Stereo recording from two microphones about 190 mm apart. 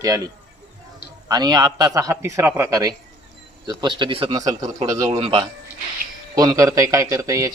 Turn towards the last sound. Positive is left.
turn(degrees=-15)  # may be behind; listen again after turning